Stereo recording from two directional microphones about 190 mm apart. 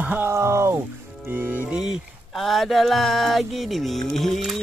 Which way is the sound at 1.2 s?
10° right (ahead or behind).